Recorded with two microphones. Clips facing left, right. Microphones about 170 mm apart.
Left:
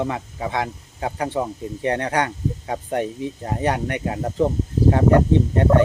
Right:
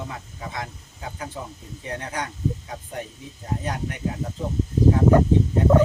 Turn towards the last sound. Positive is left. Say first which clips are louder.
# left 2 dB
turn(degrees=70)  # may be behind; listen again after turning